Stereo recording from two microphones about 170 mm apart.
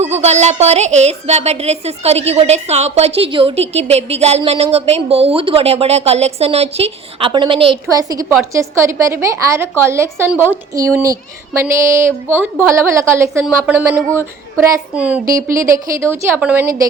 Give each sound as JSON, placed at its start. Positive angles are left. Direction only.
{"t": 0.0, "sound": "a woman's voice", "side_deg": -40}